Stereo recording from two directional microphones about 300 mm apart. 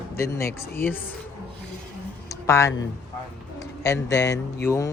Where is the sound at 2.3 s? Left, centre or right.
Centre.